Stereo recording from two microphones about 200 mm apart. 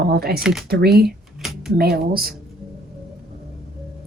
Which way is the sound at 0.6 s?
50° right (ahead or behind).